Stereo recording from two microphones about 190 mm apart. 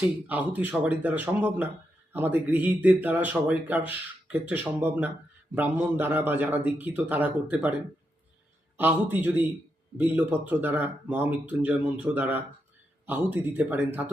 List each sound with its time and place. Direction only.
0.3 s speech: 10° right (ahead or behind)
8.8 s speech: 10° right (ahead or behind)